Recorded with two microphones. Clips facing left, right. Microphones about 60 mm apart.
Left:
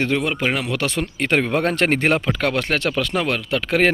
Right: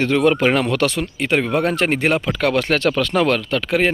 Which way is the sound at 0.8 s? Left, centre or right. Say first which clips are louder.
Right 4 dB; left.